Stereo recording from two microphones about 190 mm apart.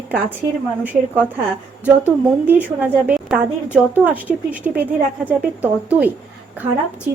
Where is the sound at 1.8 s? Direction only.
10° right (ahead or behind).